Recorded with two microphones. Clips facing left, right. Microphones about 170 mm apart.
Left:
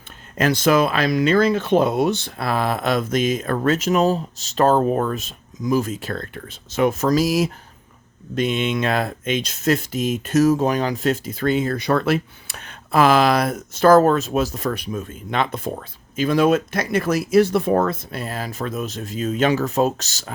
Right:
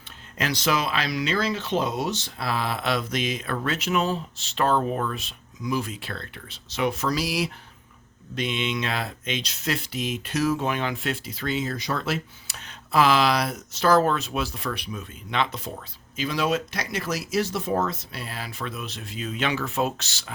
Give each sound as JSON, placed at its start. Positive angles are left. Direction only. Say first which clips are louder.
{"t": 0.3, "sound": "speech", "louder": "left 8 dB", "side_deg": 50}